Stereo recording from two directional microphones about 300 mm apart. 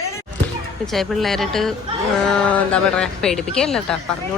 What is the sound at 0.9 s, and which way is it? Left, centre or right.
A woman's voice, centre.